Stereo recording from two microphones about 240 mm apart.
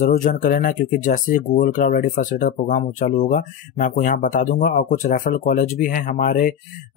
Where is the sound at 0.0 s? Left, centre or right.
Left.